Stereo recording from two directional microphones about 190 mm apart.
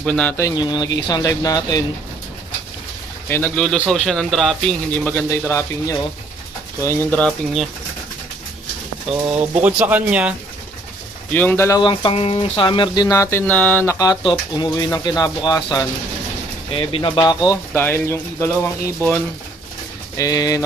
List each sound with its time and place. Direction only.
0.0 s speech: 5° left (ahead or behind)
3.3 s speech: 10° left (ahead or behind)
9.3 s speech: 10° right (ahead or behind)
11.3 s speech: 10° left (ahead or behind)
11.8 s speech: 25° left (ahead or behind)
20.2 s speech: 20° left (ahead or behind)